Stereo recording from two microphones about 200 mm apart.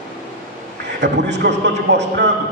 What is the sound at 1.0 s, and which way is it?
A man's voice, 60° right (ahead or behind).